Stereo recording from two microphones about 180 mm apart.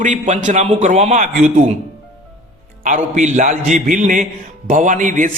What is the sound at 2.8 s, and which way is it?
A man's voice, 40° right (ahead or behind).